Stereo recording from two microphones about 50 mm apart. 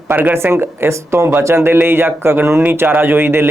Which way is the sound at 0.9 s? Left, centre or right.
Right.